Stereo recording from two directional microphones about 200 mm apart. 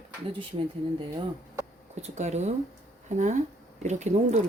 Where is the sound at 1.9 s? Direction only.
35° right (ahead or behind).